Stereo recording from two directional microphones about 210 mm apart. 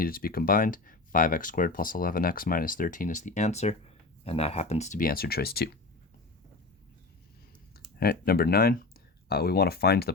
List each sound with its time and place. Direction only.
0.0 s speech: 45° left (ahead or behind)
7.9 s speech: 45° left (ahead or behind)